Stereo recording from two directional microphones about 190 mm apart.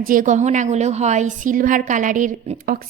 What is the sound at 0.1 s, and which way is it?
A woman's voice, 45° right (ahead or behind).